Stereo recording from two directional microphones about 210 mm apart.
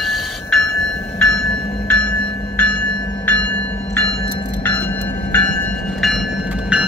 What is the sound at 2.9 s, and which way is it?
Train, 20° left (ahead or behind).